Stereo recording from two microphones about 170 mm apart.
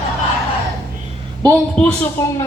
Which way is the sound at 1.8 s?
10° left (ahead or behind).